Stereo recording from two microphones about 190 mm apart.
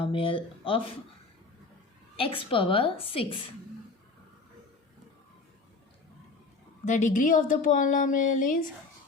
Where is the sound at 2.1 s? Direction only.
30° left (ahead or behind).